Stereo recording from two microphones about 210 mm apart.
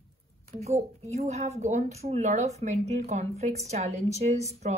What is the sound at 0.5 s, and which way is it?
Speech, 30° right (ahead or behind).